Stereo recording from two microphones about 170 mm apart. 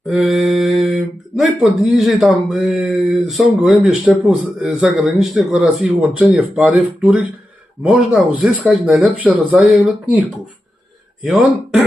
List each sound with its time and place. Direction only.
0.1 s mantra: centre (ahead or behind)
1.4 s speech: centre (ahead or behind)